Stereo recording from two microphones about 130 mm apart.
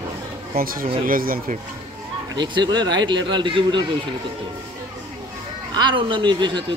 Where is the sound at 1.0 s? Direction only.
90° right.